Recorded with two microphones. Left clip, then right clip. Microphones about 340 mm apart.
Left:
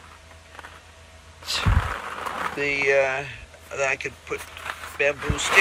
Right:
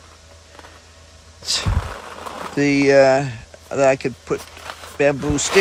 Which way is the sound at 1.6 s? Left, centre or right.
Centre.